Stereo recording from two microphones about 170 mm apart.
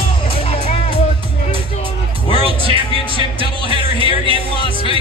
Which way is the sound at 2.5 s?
30° right (ahead or behind).